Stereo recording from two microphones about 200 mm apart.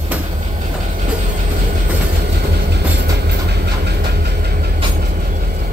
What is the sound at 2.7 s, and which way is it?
Train, 55° right (ahead or behind).